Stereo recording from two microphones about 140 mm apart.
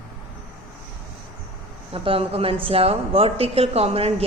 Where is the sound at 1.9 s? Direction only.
40° right (ahead or behind).